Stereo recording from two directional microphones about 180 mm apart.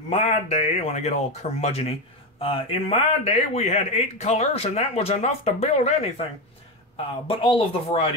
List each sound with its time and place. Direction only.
0.1 s speech: 35° left (ahead or behind)
7.2 s speech: 35° left (ahead or behind)